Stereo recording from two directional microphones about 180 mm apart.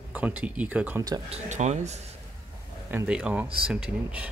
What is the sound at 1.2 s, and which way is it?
Speech, 40° right (ahead or behind).